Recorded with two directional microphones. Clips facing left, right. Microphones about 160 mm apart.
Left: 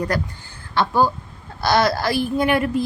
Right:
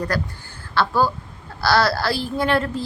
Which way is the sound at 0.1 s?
20° left (ahead or behind).